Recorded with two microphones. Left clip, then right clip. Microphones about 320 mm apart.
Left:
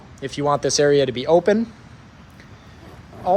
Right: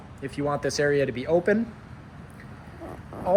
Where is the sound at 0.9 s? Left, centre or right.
Left.